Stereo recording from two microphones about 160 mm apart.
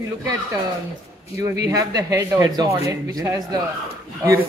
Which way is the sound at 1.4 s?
20° right (ahead or behind).